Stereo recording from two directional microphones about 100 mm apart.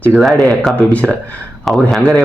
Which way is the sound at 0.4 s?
5° left (ahead or behind).